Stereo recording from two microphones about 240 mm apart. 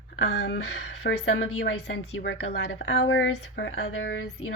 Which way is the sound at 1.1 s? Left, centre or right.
Left.